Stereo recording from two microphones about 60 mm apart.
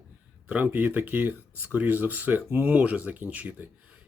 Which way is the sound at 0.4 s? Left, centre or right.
Right.